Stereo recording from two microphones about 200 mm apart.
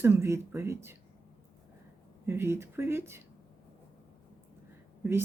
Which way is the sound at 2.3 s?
15° right (ahead or behind).